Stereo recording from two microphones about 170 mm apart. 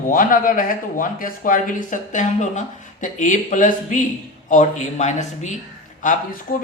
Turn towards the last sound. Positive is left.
turn(degrees=55)  # may be behind; listen again after turning